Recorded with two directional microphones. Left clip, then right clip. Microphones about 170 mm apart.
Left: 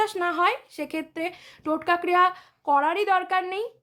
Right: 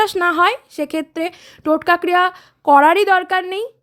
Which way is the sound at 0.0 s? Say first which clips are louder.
Right 8 dB; 40° right (ahead or behind).